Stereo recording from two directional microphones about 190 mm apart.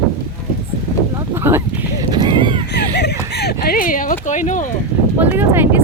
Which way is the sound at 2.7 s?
65° left (ahead or behind).